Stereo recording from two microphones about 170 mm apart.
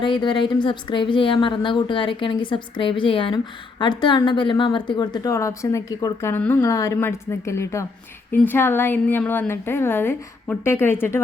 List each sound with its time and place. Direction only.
0.0 s a woman's voice: 25° left (ahead or behind)